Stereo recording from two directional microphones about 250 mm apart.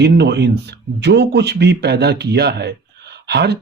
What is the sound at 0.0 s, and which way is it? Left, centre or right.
Speech, right.